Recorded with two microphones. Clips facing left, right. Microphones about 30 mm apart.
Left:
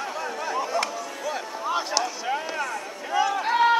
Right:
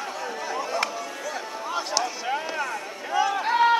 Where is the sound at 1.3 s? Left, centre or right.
Centre.